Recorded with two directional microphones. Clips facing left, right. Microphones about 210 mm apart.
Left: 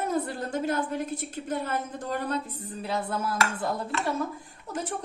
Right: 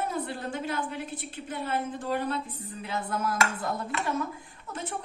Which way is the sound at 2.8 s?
35° left (ahead or behind).